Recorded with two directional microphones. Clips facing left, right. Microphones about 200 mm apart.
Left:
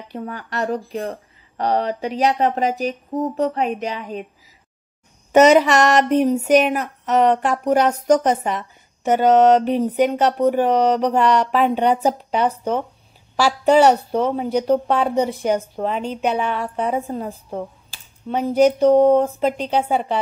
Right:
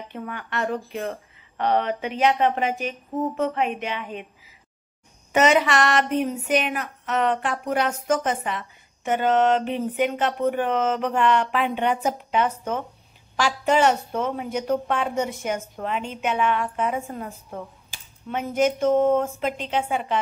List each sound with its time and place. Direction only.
0.1 s speech: 35° left (ahead or behind)
5.3 s speech: 40° left (ahead or behind)